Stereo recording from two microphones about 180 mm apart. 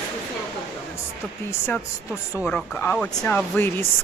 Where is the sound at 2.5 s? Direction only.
5° left (ahead or behind).